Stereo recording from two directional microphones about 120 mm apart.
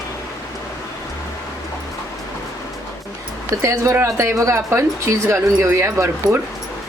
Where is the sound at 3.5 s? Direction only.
25° right (ahead or behind).